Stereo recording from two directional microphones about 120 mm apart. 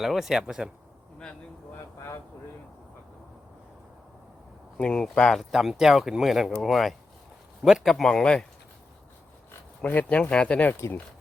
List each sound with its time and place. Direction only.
0.0 s speech: centre (ahead or behind)
1.2 s a sound: 10° left (ahead or behind)
4.8 s speech: 5° left (ahead or behind)
9.8 s speech: 15° left (ahead or behind)
10.8 s speech: 20° left (ahead or behind)